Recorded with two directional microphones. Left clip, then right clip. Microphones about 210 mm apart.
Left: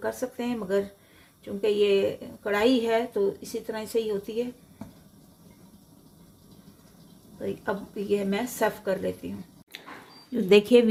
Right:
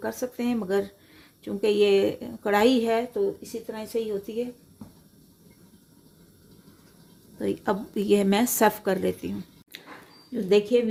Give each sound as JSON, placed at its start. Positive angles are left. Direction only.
{"t": 0.0, "sound": "a woman's voice", "side_deg": -15}
{"t": 3.1, "sound": "speech", "side_deg": 0}
{"t": 7.3, "sound": "a woman's voice", "side_deg": -35}
{"t": 9.7, "sound": "a sound", "side_deg": -5}
{"t": 10.3, "sound": "speech", "side_deg": 10}